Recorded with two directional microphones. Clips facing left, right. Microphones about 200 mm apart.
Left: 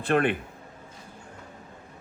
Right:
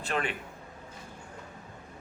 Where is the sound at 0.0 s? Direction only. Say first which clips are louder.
Left 9 dB; 55° left (ahead or behind).